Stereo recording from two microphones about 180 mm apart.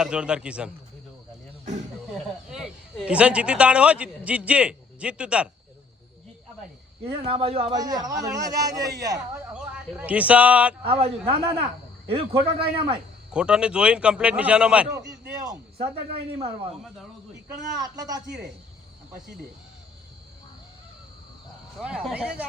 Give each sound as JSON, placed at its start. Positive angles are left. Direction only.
{"t": 0.0, "sound": "a man's voice", "side_deg": -5}
{"t": 2.1, "sound": "speech", "side_deg": 0}
{"t": 7.0, "sound": "a man's voice", "side_deg": -30}
{"t": 7.8, "sound": "a man's voice", "side_deg": -20}
{"t": 9.5, "sound": "speech", "side_deg": -5}
{"t": 10.8, "sound": "a man's voice", "side_deg": -30}
{"t": 13.3, "sound": "a man's voice", "side_deg": -5}
{"t": 15.8, "sound": "a man's voice", "side_deg": -35}
{"t": 17.7, "sound": "a man's voice", "side_deg": -20}
{"t": 21.8, "sound": "a man's voice", "side_deg": -5}